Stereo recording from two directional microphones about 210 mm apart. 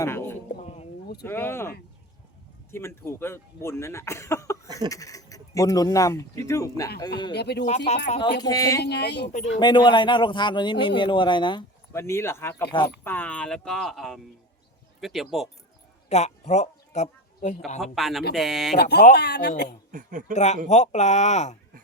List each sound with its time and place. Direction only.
0.0 s a sound: 10° left (ahead or behind)
1.2 s speech: 10° left (ahead or behind)
2.7 s speech: 10° left (ahead or behind)
7.3 s speech: 50° left (ahead or behind)
7.9 s speech: 35° left (ahead or behind)
8.4 s speech: 15° left (ahead or behind)
8.8 s speech: 50° left (ahead or behind)
9.6 s a man's voice: 20° left (ahead or behind); by 15.4 s centre (ahead or behind)
16.0 s speech: 30° left (ahead or behind)
17.7 s speech: centre (ahead or behind)
18.8 s speech: 50° left (ahead or behind)
19.9 s speech: 40° right (ahead or behind)
20.3 s speech: 30° left (ahead or behind)